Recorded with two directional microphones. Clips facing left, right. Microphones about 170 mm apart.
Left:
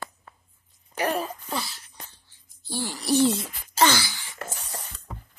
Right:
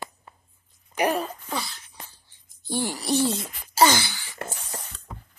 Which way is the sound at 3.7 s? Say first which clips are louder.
Right 2 dB; 10° right (ahead or behind).